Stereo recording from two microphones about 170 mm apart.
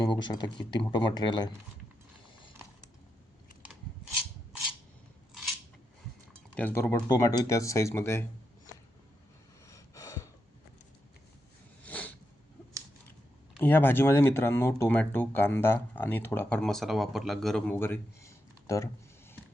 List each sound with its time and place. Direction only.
0.0 s speech: 25° left (ahead or behind)
5.3 s scissors: centre (ahead or behind)
6.5 s speech: 10° left (ahead or behind)
7.1 s speech: 20° left (ahead or behind)
9.6 s gasp: 20° left (ahead or behind)
11.9 s a sound: 10° left (ahead or behind)
13.6 s speech: 10° left (ahead or behind)
17.7 s a sound: 15° left (ahead or behind)